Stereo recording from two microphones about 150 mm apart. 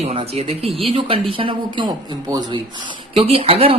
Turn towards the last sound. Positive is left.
turn(degrees=-40)  # may be behind; listen again after turning